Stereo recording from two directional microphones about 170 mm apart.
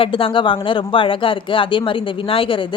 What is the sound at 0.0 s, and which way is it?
Speech, 30° left (ahead or behind).